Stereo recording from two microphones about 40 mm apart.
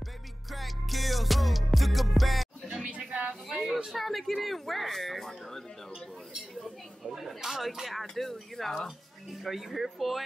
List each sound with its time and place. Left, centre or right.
0.5 s music: centre
3.1 s a sound: right
3.4 s speech: centre
7.0 s speech: centre